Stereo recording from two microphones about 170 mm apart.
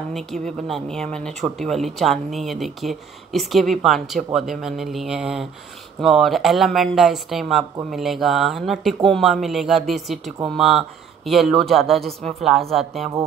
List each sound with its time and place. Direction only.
0.1 s speech: 5° left (ahead or behind)